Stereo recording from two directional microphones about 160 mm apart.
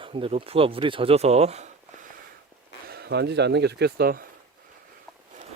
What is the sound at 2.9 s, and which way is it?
Speech, 90° right.